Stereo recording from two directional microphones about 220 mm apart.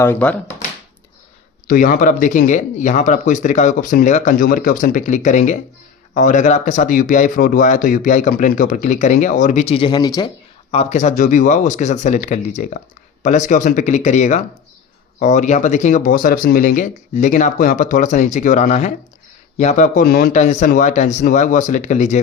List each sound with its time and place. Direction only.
0.0 s speech: 10° left (ahead or behind)
1.6 s speech: 40° left (ahead or behind)